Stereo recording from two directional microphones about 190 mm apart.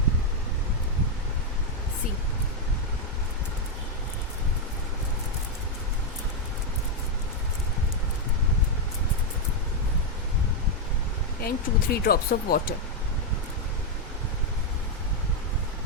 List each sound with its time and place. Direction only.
11.3 s speech: 55° left (ahead or behind)